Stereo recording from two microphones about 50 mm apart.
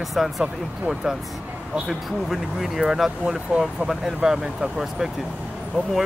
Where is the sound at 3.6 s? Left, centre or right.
Centre.